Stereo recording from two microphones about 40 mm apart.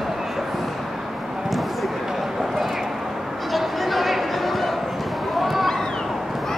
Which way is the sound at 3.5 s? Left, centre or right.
Centre.